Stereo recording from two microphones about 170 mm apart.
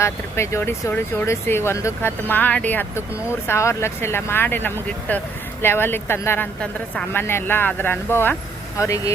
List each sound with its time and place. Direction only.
0.0 s speech: 15° left (ahead or behind)